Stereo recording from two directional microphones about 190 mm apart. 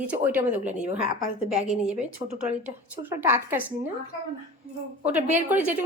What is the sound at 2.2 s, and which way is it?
Speech, 25° right (ahead or behind).